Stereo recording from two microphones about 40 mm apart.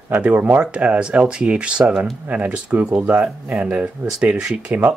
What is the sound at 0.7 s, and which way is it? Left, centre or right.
Speech, right.